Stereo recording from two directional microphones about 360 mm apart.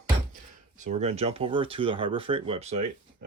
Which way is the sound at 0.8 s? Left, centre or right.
Centre.